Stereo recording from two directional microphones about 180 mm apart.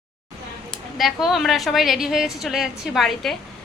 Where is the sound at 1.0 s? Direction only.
Centre (ahead or behind).